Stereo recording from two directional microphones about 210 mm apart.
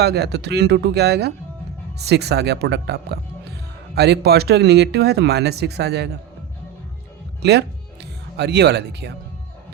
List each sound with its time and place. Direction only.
0.0 s speech: 50° right (ahead or behind)
8.4 s speech: 55° right (ahead or behind)